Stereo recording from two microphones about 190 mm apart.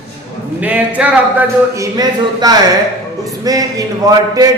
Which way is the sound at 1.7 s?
20° right (ahead or behind).